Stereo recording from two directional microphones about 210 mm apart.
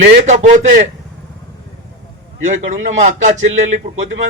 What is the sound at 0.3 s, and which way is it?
Speech, 35° right (ahead or behind).